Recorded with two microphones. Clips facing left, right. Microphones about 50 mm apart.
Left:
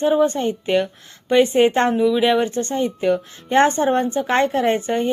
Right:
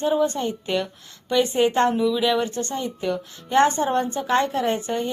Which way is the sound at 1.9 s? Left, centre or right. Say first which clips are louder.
Left 4 dB; left.